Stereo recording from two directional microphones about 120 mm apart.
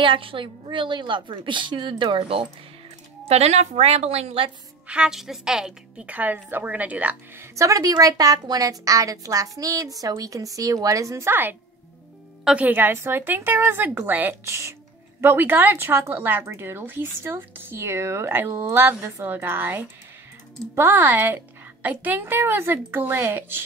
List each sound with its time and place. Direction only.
0.0 s a woman's voice: 45° right (ahead or behind)
3.3 s a woman's voice: 65° right (ahead or behind)
4.8 s a woman's voice: 10° right (ahead or behind)
7.5 s a woman's voice: 25° right (ahead or behind)